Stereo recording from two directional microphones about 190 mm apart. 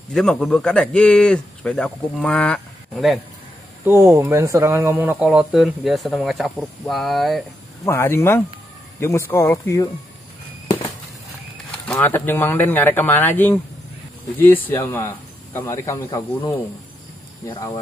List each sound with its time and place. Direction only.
0.1 s speech: 5° left (ahead or behind)
3.8 s speech: 15° right (ahead or behind)
7.8 s speech: 10° left (ahead or behind)
11.9 s speech: 10° left (ahead or behind)